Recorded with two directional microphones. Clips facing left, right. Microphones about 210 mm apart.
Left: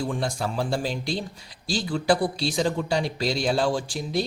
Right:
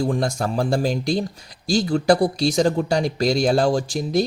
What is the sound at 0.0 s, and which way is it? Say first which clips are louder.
A man's voice: right 5 dB; 40° right (ahead or behind).